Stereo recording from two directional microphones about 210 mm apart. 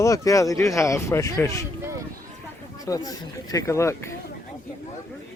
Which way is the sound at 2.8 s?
15° left (ahead or behind).